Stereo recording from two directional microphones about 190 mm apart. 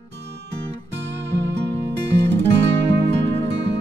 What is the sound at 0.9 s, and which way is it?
Music, 65° right (ahead or behind).